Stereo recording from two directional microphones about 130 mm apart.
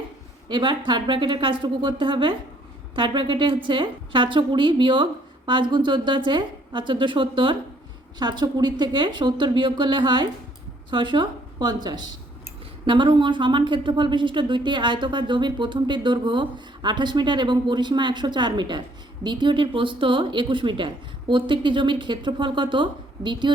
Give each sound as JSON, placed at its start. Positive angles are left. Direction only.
{"t": 0.4, "sound": "a woman's voice", "side_deg": -35}